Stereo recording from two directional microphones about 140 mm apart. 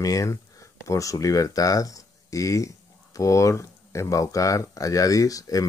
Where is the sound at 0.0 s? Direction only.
25° left (ahead or behind).